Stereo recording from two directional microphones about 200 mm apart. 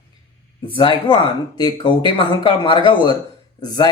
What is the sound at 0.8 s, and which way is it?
Speech, 25° left (ahead or behind).